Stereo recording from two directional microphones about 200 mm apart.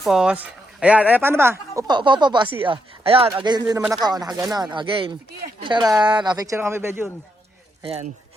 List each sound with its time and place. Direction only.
0.0 s speech: 5° right (ahead or behind)
7.9 s speech: 30° right (ahead or behind)